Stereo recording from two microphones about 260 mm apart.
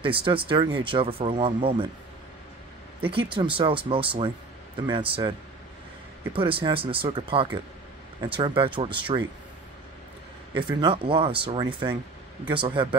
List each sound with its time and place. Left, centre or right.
0.0 s speech: right
3.3 s speech: centre
6.3 s speech: centre
10.5 s speech: centre